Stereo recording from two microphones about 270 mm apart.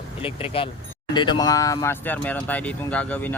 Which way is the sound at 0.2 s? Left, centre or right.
Centre.